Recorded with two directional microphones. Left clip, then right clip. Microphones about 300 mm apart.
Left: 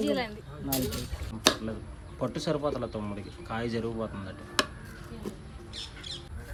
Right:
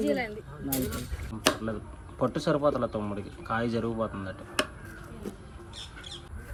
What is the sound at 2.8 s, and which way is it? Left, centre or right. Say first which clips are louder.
Speech: right 4 dB; right.